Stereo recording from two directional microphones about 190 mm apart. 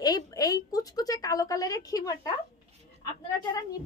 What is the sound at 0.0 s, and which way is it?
A woman's voice, 20° left (ahead or behind).